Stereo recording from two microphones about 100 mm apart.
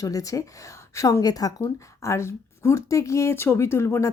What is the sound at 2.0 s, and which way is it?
Speech, 30° left (ahead or behind).